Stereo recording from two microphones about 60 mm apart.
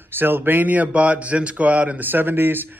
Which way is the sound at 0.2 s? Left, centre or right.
Right.